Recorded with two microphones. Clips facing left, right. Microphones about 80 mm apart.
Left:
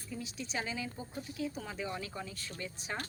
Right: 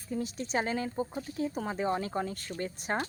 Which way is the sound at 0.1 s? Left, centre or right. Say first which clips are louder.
Right 8 dB; right.